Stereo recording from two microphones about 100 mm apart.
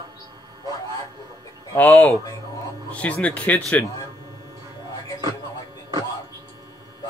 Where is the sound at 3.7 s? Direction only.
30° left (ahead or behind).